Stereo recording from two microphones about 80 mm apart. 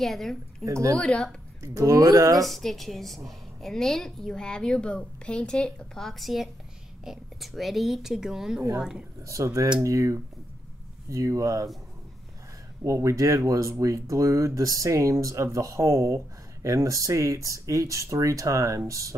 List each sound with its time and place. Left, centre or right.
0.0 s speech: centre
0.7 s speech: right
0.9 s a woman's voice: centre
1.6 s speech: right
2.4 s a woman's voice: centre
9.2 s speech: right
12.8 s speech: right